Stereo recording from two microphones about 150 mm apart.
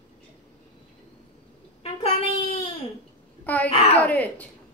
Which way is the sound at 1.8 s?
40° left (ahead or behind).